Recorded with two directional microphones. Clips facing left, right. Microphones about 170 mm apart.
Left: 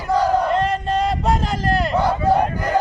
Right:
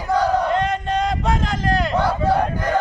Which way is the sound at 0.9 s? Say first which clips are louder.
Left 1 dB; centre (ahead or behind).